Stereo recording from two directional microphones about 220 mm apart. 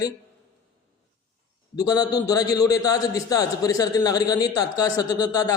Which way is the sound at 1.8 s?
15° left (ahead or behind).